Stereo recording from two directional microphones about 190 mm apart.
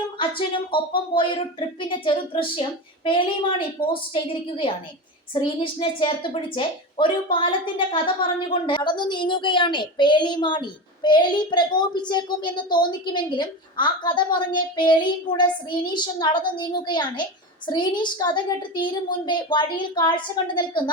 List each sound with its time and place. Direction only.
0.2 s a woman's voice: 25° left (ahead or behind)
5.8 s a woman's voice: 30° left (ahead or behind)